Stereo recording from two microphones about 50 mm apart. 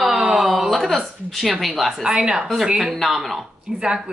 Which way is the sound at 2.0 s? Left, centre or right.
Centre.